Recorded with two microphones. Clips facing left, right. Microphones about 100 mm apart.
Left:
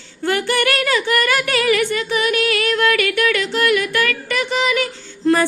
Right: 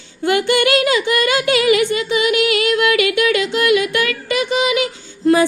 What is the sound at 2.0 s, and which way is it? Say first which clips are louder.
Female singing: right 2 dB; 15° right (ahead or behind).